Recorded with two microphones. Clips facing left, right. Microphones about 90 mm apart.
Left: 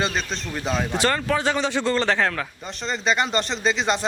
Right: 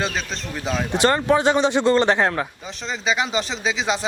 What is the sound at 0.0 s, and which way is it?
Speech, centre (ahead or behind).